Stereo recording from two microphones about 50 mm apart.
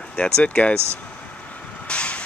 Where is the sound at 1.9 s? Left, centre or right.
Left.